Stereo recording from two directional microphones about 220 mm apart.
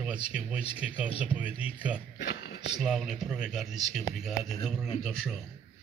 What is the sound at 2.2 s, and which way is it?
Speech, 50° left (ahead or behind).